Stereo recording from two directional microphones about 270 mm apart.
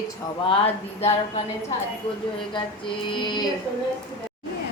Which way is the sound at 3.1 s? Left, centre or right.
Centre.